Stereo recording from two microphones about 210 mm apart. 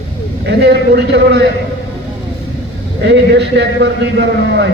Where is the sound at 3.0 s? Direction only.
55° right (ahead or behind).